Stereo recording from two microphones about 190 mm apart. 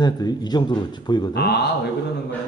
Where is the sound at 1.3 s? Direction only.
60° left (ahead or behind).